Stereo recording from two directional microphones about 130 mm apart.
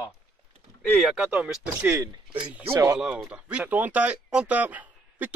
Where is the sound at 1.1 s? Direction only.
10° right (ahead or behind).